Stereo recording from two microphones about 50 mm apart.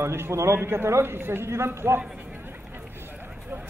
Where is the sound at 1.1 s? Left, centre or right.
Right.